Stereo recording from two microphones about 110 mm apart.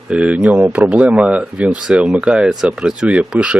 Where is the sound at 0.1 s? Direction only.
10° right (ahead or behind).